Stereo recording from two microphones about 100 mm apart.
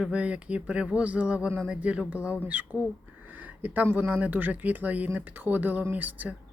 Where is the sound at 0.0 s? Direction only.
15° right (ahead or behind).